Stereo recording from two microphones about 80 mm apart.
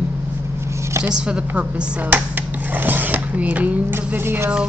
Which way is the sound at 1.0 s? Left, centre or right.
Centre.